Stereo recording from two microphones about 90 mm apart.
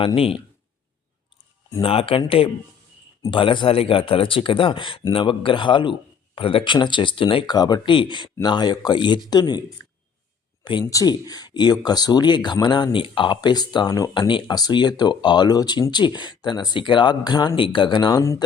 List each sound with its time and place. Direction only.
0.0 s speech: 90° left
1.8 s speech: 90° left
3.2 s speech: 65° left (ahead or behind); by 6.7 s 85° left
6.7 s speech: 60° left (ahead or behind)
7.4 s speech: 50° left (ahead or behind)
10.8 s speech: 45° left (ahead or behind)
14.1 s speech: 65° left (ahead or behind)
17.5 s speech: 70° left (ahead or behind)